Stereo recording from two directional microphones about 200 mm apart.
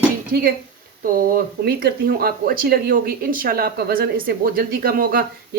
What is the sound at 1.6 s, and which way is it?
Speech, 50° right (ahead or behind).